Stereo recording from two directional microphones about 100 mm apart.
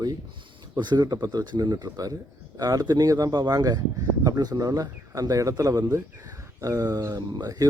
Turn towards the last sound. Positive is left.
turn(degrees=-35)  # may be behind; listen again after turning